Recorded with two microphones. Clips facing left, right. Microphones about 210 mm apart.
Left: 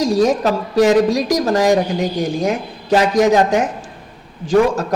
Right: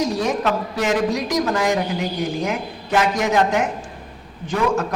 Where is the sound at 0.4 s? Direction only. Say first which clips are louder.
Left 7 dB; 35° left (ahead or behind).